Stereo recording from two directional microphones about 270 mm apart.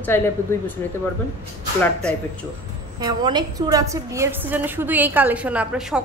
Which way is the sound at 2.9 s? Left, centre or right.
Centre.